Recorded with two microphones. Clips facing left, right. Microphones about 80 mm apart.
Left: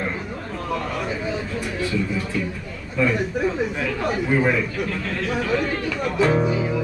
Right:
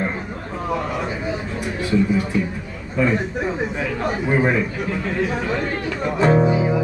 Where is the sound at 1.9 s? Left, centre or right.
Centre.